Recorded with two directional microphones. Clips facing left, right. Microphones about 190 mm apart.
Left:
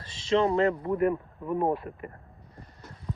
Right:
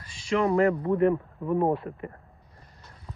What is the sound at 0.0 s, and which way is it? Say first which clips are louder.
Speech: left 1 dB; 25° left (ahead or behind).